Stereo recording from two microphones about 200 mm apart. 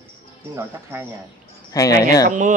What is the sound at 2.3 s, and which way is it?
Speech, 40° right (ahead or behind).